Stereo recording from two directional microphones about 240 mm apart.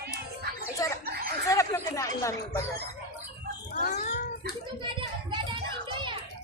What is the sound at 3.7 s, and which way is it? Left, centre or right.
Dog, left.